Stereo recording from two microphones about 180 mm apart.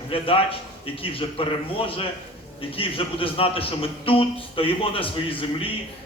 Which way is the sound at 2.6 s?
30° left (ahead or behind).